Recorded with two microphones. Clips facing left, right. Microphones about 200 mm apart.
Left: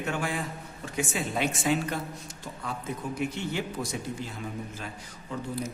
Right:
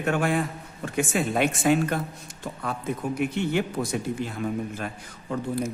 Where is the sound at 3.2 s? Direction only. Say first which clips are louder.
Right 6 dB; 60° right (ahead or behind).